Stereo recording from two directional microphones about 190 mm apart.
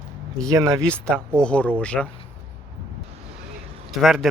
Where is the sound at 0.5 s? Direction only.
15° right (ahead or behind).